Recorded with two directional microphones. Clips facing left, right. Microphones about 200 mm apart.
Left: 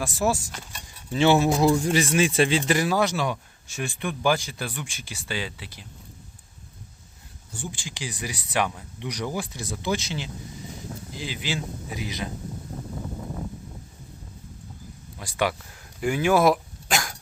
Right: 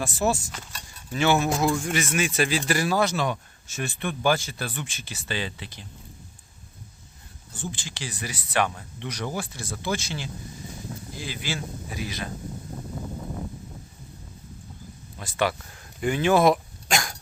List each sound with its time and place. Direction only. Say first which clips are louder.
0.0 s speech: even; 10° left (ahead or behind)
1.1 s speech: left 3 dB; 30° left (ahead or behind); by 5.8 s 10° left (ahead or behind)
7.5 s speech: right 1 dB; 15° left (ahead or behind)
15.2 s speech: even; 15° left (ahead or behind)
16.0 s dog: even; 10° left (ahead or behind)